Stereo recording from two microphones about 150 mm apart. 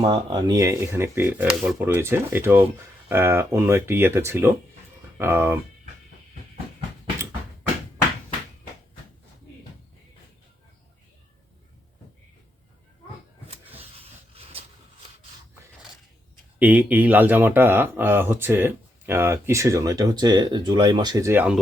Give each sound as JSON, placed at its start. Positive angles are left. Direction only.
{"t": 0.0, "sound": "speech", "side_deg": -30}
{"t": 13.7, "sound": "a sound", "side_deg": -40}
{"t": 16.6, "sound": "speech", "side_deg": -10}